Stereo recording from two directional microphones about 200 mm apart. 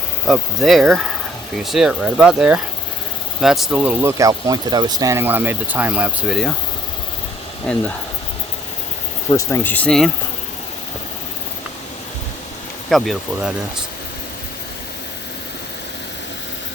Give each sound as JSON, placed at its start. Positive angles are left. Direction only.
{"t": 0.3, "sound": "speech", "side_deg": 0}
{"t": 9.3, "sound": "speech", "side_deg": 15}
{"t": 12.9, "sound": "speech", "side_deg": 0}